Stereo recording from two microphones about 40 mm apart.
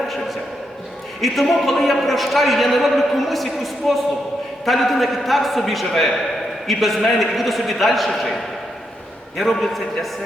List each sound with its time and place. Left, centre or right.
1.2 s a man's voice: centre
9.4 s a man's voice: centre